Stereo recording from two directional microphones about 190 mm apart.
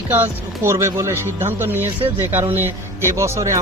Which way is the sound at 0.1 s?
10° right (ahead or behind).